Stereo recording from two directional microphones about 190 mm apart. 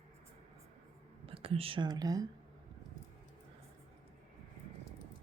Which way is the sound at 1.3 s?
30° right (ahead or behind).